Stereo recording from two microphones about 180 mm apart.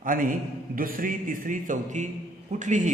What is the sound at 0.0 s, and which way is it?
A man's voice, 50° right (ahead or behind).